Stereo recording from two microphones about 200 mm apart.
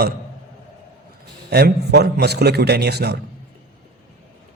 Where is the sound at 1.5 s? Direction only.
55° right (ahead or behind).